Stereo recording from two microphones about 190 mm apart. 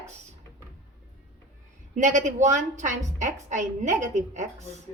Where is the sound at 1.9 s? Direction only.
40° right (ahead or behind).